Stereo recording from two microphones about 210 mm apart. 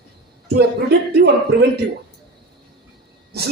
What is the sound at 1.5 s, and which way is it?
Speech, 50° right (ahead or behind).